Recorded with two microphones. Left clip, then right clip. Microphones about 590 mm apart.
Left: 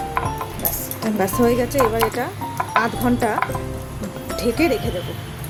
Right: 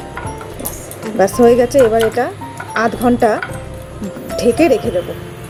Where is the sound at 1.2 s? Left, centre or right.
Left.